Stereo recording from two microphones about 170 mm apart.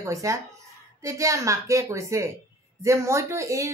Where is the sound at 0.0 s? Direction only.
20° right (ahead or behind).